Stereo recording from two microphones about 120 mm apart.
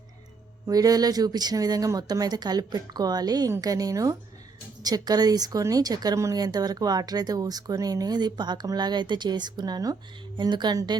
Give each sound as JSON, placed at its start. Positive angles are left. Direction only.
{"t": 0.7, "sound": "a woman's voice", "side_deg": -30}